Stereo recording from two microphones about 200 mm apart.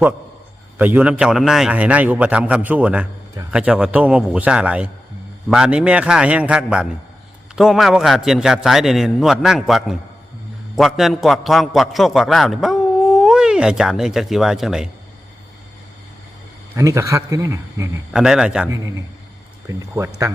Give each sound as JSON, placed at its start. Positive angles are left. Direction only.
{"t": 0.8, "sound": "a man's voice", "side_deg": -10}
{"t": 16.7, "sound": "a man's voice", "side_deg": -15}
{"t": 18.1, "sound": "a man's voice", "side_deg": -5}
{"t": 19.6, "sound": "a man's voice", "side_deg": -15}